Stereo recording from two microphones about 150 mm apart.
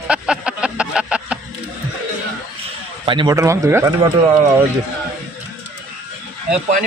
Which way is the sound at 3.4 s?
20° right (ahead or behind).